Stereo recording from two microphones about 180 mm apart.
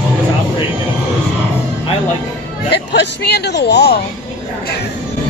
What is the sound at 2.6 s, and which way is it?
Speech, 65° left (ahead or behind).